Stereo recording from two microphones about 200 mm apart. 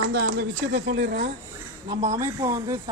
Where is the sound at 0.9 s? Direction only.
65° right (ahead or behind).